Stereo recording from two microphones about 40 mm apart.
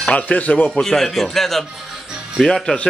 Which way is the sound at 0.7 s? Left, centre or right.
Centre.